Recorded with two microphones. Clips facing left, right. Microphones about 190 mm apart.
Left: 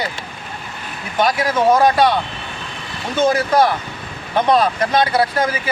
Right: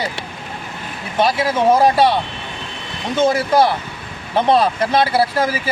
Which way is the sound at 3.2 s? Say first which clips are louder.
Even; 25° right (ahead or behind).